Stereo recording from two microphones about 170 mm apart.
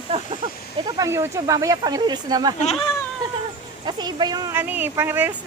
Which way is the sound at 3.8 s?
25° right (ahead or behind).